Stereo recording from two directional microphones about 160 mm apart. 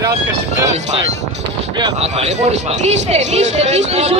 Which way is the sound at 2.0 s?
40° right (ahead or behind).